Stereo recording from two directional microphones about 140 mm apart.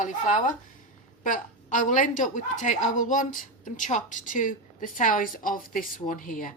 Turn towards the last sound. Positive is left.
turn(degrees=80)